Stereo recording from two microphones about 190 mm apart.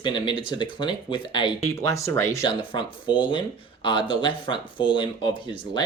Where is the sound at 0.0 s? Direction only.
25° left (ahead or behind).